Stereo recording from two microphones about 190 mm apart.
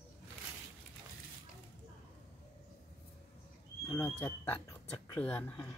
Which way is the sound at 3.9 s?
10° left (ahead or behind).